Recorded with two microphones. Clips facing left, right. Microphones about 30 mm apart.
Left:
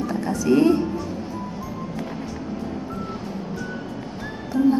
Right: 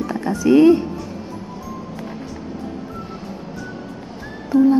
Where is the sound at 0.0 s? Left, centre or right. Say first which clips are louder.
Right 3 dB; centre.